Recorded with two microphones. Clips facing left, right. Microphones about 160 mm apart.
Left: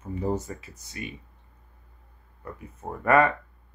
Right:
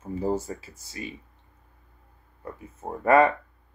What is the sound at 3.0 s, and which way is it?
Speech, 25° right (ahead or behind).